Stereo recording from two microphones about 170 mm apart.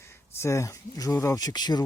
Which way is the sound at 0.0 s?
15° left (ahead or behind).